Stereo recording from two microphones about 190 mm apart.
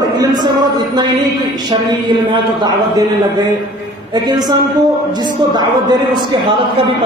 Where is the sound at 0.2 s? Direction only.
20° right (ahead or behind).